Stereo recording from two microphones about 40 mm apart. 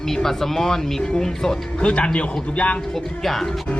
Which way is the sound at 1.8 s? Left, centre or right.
Left.